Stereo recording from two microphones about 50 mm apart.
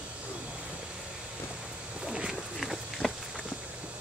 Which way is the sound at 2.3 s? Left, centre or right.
Centre.